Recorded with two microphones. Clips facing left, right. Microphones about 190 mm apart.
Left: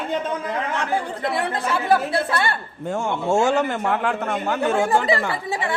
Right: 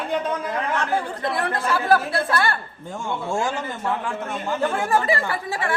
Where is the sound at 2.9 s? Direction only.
70° left (ahead or behind).